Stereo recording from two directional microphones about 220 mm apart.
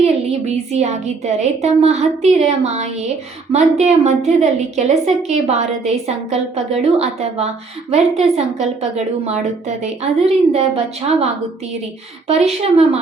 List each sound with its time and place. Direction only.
0.0 s a woman's voice: 30° right (ahead or behind)
12.3 s a woman's voice: 30° right (ahead or behind)